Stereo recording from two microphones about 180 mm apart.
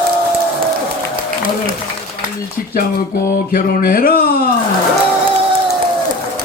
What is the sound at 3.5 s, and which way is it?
Speech, 50° left (ahead or behind).